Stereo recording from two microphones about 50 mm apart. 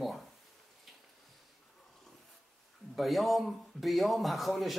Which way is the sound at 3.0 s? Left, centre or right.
Centre.